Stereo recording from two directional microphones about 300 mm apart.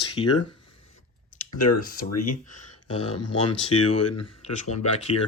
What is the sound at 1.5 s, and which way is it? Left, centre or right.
Speech, left.